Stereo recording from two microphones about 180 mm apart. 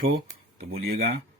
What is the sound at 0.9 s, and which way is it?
Speech, 60° right (ahead or behind).